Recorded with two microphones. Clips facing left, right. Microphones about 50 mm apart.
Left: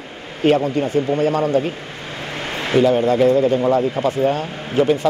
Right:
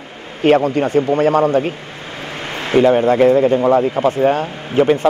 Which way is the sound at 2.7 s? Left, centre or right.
Right.